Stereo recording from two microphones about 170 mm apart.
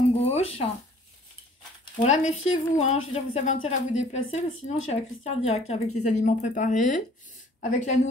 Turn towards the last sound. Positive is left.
turn(degrees=45)  # may be behind; listen again after turning